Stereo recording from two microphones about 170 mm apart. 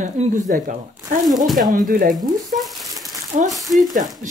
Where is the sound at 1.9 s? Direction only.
55° right (ahead or behind).